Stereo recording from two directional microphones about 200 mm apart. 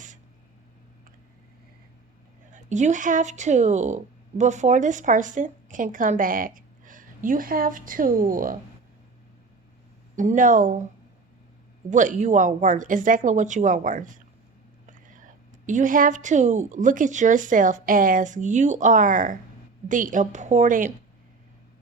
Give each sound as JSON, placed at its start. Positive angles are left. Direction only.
{"t": 2.5, "sound": "speech", "side_deg": -35}
{"t": 10.2, "sound": "a woman's voice", "side_deg": -40}
{"t": 11.9, "sound": "a woman's voice", "side_deg": -40}